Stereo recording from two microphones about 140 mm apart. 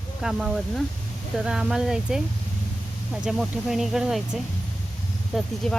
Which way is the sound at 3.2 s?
Centre (ahead or behind).